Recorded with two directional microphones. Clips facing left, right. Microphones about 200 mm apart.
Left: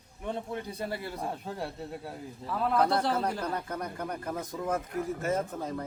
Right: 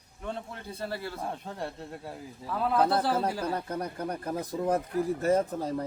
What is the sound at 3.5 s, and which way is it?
Speech, 30° right (ahead or behind).